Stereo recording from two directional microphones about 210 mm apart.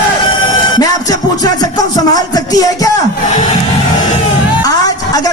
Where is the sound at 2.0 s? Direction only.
15° left (ahead or behind).